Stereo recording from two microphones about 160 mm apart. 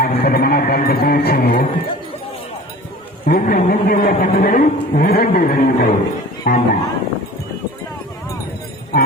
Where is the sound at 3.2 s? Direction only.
65° left (ahead or behind).